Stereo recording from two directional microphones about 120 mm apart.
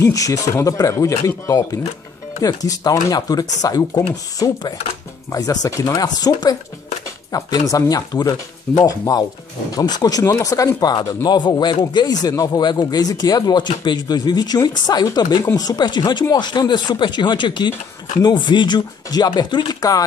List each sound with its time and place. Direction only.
0.0 s speech: 25° left (ahead or behind)